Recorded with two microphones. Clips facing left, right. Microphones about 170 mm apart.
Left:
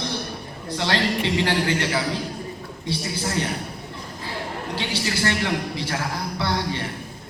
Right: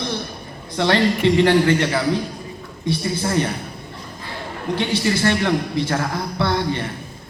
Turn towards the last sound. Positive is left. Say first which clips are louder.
# right 4 dB
turn(degrees=-55)  # may be behind; listen again after turning